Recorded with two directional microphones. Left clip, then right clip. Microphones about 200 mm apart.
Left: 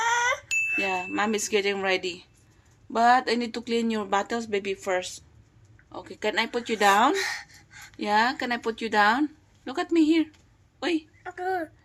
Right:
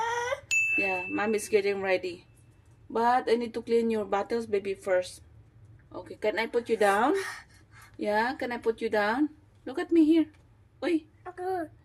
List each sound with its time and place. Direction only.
0.0 s a woman's voice: 5° right (ahead or behind)
7.1 s gasp: 20° right (ahead or behind)
7.9 s a woman's voice: centre (ahead or behind)